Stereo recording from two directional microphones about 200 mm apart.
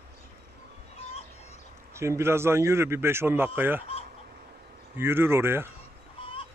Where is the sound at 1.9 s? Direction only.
15° right (ahead or behind).